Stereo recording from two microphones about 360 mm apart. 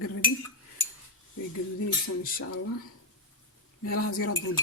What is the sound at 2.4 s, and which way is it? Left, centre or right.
Speech, left.